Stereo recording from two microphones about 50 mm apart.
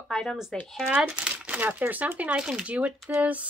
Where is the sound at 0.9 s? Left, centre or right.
Right.